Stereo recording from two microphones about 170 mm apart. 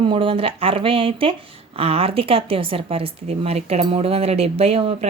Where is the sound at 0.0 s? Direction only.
30° right (ahead or behind).